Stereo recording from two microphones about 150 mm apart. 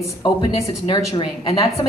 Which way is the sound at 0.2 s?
30° left (ahead or behind).